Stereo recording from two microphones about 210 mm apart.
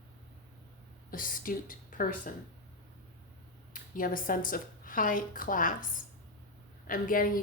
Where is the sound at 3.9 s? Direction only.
40° left (ahead or behind).